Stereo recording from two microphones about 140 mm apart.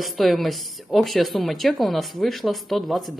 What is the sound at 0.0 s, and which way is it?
A woman's voice, centre (ahead or behind).